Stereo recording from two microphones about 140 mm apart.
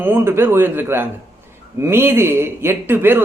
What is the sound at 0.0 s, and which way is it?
A man's voice, 15° right (ahead or behind).